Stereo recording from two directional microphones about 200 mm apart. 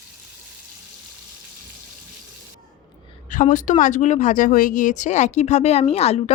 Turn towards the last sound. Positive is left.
turn(degrees=30)  # may be behind; listen again after turning